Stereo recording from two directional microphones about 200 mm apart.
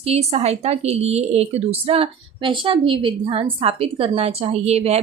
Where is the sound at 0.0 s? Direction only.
30° right (ahead or behind).